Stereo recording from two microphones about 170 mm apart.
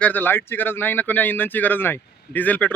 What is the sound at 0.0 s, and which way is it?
Speech, 10° left (ahead or behind).